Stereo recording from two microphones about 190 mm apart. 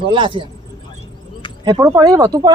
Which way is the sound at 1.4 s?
25° left (ahead or behind).